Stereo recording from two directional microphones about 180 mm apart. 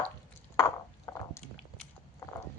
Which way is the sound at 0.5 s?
15° left (ahead or behind).